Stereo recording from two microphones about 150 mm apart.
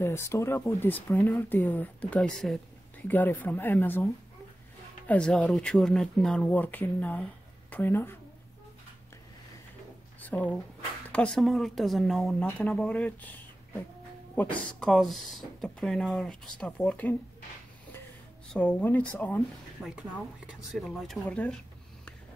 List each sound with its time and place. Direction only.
0.0 s speech: 20° left (ahead or behind)
10.2 s speech: 10° left (ahead or behind)
14.4 s speech: 10° left (ahead or behind)
18.5 s speech: 10° left (ahead or behind)
19.8 s speech: centre (ahead or behind)